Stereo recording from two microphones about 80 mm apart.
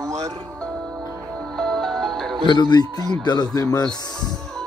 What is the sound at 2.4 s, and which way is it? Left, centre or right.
Speech, left.